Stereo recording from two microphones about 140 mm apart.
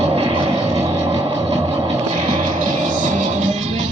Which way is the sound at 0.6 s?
20° right (ahead or behind).